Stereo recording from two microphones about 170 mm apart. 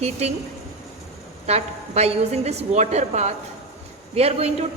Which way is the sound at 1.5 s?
40° right (ahead or behind).